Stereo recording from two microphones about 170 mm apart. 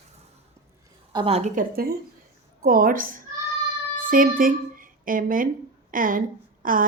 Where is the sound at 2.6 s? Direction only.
55° right (ahead or behind).